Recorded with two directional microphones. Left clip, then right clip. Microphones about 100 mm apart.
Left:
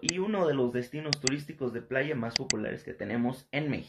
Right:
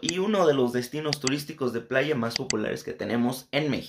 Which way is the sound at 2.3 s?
Centre (ahead or behind).